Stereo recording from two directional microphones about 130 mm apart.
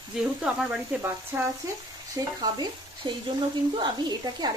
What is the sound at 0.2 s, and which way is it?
Speech, 5° right (ahead or behind).